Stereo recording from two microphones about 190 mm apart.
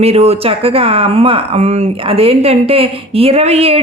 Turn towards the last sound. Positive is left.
turn(degrees=-30)  # may be behind; listen again after turning